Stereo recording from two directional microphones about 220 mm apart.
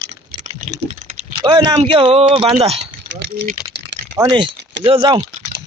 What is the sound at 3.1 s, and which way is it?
Speech, 55° right (ahead or behind).